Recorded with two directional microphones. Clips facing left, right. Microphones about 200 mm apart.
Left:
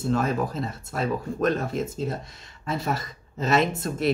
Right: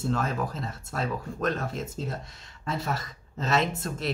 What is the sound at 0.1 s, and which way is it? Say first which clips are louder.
Speech: left 7 dB; 10° left (ahead or behind).